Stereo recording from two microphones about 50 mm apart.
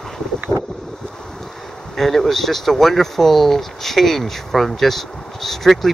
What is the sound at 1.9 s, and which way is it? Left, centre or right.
Speech, centre.